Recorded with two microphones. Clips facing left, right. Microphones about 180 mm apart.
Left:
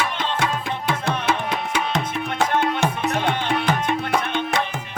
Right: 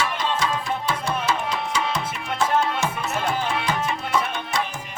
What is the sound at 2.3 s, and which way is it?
Music, 60° left (ahead or behind).